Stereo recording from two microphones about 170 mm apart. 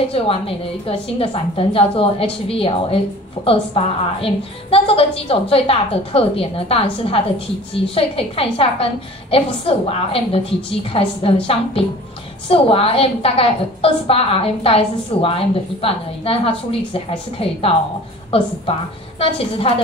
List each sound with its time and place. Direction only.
0.1 s a woman's voice: 35° left (ahead or behind)
12.4 s a woman's voice: 35° left (ahead or behind)
19.1 s a woman's voice: 35° left (ahead or behind)